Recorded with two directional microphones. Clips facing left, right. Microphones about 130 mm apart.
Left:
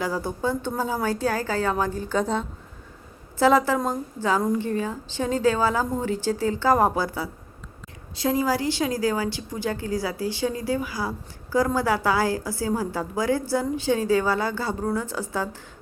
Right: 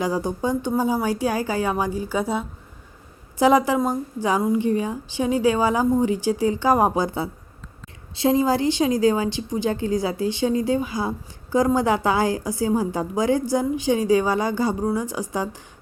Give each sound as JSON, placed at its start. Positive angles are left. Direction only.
{"t": 0.0, "sound": "a woman's voice", "side_deg": -15}